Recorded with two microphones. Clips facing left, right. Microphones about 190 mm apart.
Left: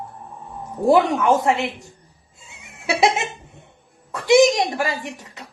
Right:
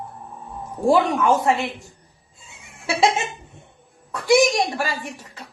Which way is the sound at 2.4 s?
20° left (ahead or behind).